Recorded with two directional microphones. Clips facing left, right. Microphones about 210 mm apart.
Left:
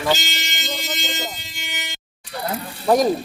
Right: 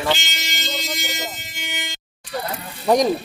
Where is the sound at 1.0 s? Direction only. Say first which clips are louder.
Left 1 dB; 15° right (ahead or behind).